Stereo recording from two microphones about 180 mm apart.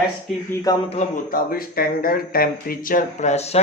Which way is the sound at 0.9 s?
40° left (ahead or behind).